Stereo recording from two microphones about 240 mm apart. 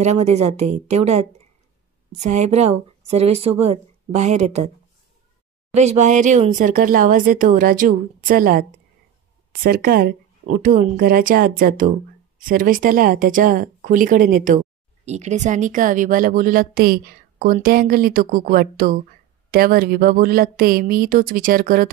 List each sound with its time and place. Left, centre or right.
0.0 s a woman's voice: right
5.7 s a woman's voice: right